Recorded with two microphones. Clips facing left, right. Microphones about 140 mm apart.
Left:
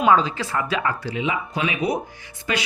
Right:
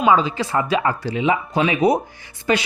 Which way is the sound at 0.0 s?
5° right (ahead or behind).